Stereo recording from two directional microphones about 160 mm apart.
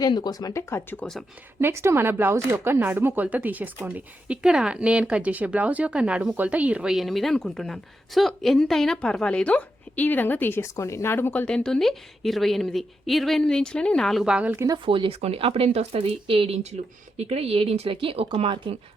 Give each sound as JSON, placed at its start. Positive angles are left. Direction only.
{"t": 0.0, "sound": "speech", "side_deg": 25}
{"t": 1.5, "sound": "speech", "side_deg": -15}
{"t": 14.8, "sound": "speech", "side_deg": -35}